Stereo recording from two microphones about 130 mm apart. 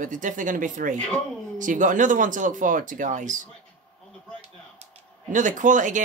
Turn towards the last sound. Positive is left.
turn(degrees=-75)  # may be behind; listen again after turning